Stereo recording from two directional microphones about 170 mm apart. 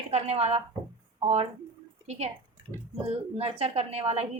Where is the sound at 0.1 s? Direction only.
40° right (ahead or behind).